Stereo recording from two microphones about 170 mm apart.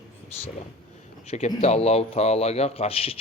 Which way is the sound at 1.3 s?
40° left (ahead or behind).